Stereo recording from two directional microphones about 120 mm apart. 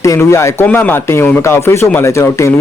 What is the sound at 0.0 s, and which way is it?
Speech, 25° left (ahead or behind).